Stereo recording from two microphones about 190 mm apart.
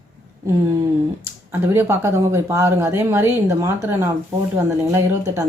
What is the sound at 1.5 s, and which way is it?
Speech, 10° right (ahead or behind).